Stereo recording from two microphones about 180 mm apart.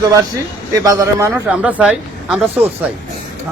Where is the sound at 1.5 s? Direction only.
5° right (ahead or behind).